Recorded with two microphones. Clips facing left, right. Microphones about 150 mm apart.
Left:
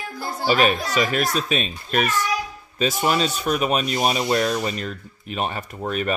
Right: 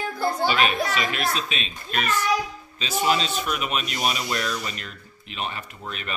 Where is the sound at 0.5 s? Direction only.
45° left (ahead or behind).